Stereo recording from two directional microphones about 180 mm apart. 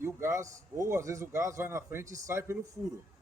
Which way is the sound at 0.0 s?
15° right (ahead or behind).